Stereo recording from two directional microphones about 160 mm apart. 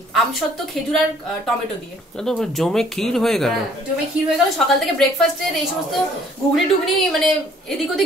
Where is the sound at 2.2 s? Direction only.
5° left (ahead or behind).